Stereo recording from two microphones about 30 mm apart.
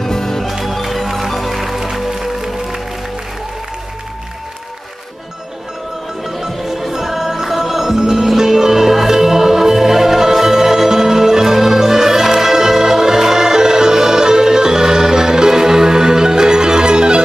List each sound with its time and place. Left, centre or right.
0.0 s music: centre
0.5 s music: centre
6.5 s music: centre; by 17.2 s right